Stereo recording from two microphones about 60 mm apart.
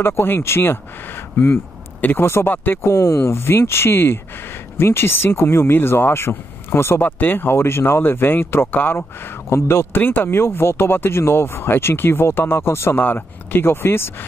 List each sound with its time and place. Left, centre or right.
0.0 s speech: left
2.2 s speech: left
2.5 s speech: left
2.8 s speech: left
7.0 s speech: left
9.5 s speech: left
12.9 s speech: left